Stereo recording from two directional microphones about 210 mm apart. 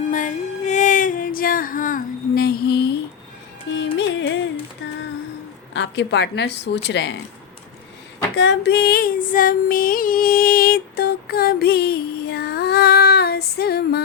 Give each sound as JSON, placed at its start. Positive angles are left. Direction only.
{"t": 0.1, "sound": "a sound", "side_deg": 35}
{"t": 3.9, "sound": "music", "side_deg": 60}
{"t": 5.7, "sound": "a woman's voice", "side_deg": 55}
{"t": 8.4, "sound": "female singing", "side_deg": 55}